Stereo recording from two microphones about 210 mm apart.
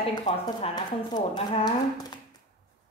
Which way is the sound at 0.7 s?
20° left (ahead or behind).